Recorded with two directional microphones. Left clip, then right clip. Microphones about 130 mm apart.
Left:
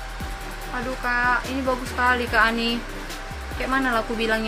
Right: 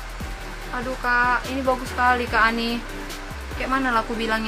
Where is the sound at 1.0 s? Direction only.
10° right (ahead or behind).